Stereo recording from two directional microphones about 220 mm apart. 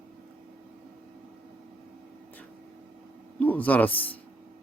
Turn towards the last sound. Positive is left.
turn(degrees=5)  # may be behind; listen again after turning